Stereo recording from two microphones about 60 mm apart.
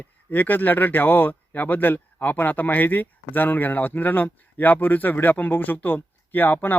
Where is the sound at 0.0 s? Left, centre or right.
Left.